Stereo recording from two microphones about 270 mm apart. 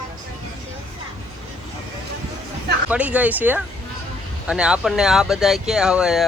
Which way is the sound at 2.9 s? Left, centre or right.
Centre.